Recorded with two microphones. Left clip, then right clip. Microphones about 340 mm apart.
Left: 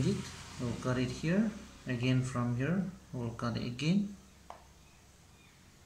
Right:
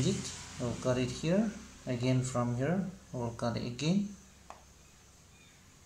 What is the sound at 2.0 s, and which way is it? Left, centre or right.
Speech, centre.